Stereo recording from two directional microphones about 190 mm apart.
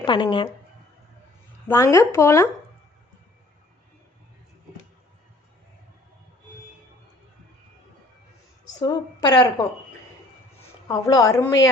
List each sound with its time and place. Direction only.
0.0 s a woman's voice: 25° left (ahead or behind)
1.6 s speech: 15° left (ahead or behind)
8.8 s a woman's voice: 25° left (ahead or behind)
10.8 s speech: 20° left (ahead or behind)